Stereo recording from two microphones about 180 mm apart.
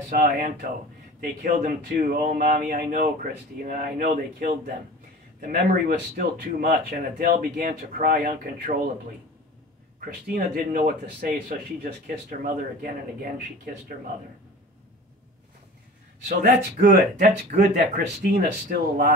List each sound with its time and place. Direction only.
0.1 s speech: 50° right (ahead or behind)
9.9 s speech: 55° right (ahead or behind)
16.3 s speech: 55° right (ahead or behind)